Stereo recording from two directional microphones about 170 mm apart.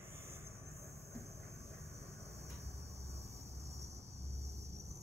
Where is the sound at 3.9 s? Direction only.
40° right (ahead or behind).